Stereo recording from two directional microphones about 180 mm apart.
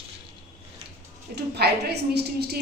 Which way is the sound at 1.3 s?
65° right (ahead or behind).